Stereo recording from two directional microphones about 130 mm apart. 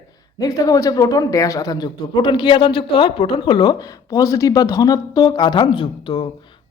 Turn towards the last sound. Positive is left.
turn(degrees=40)  # may be behind; listen again after turning